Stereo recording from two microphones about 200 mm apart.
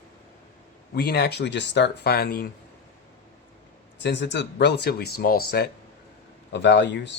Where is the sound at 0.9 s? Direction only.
55° left (ahead or behind).